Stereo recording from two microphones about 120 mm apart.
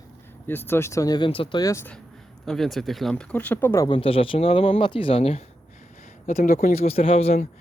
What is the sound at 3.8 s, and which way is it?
Speech, 50° left (ahead or behind).